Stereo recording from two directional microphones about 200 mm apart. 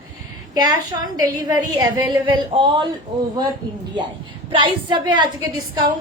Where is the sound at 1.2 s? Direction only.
20° right (ahead or behind).